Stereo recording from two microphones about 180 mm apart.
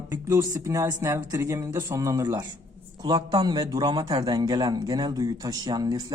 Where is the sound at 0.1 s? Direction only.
15° right (ahead or behind).